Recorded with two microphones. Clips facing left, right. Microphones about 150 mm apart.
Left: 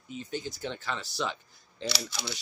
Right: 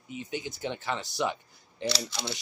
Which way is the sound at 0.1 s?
15° right (ahead or behind).